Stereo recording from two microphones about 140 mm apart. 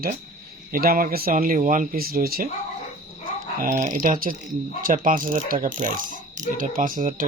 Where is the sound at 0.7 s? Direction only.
90° right.